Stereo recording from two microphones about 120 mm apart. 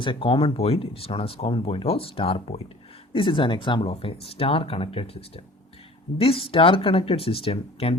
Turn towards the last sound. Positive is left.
turn(degrees=50)  # may be behind; listen again after turning